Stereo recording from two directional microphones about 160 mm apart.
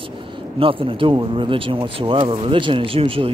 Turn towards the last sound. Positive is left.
turn(degrees=-35)  # may be behind; listen again after turning